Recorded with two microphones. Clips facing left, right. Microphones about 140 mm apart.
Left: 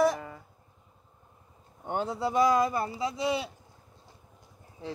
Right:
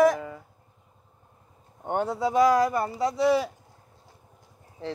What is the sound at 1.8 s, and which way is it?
Speech, 65° right (ahead or behind).